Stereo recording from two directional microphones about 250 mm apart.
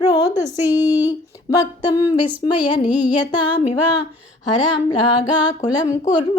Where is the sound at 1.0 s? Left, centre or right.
Centre.